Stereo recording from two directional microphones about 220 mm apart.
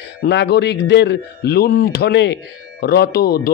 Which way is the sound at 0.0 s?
50° left (ahead or behind).